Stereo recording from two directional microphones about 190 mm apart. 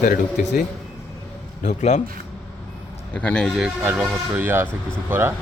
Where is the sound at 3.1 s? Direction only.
5° left (ahead or behind); by 5.3 s 10° right (ahead or behind).